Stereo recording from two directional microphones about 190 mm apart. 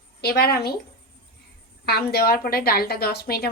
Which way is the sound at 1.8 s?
55° left (ahead or behind).